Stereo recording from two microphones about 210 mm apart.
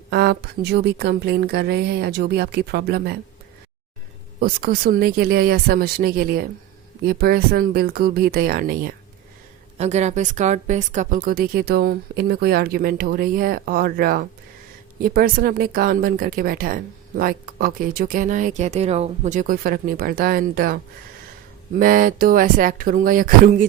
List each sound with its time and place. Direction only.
0.1 s speech: 50° right (ahead or behind)
4.4 s speech: 45° right (ahead or behind)
9.7 s speech: 30° right (ahead or behind)
21.8 s speech: 40° right (ahead or behind)